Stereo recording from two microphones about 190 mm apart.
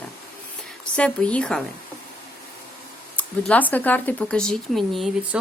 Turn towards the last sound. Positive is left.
turn(degrees=0)  # may be behind; listen again after turning